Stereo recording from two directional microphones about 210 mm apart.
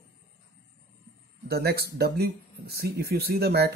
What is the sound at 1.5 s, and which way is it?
Speech, 50° right (ahead or behind).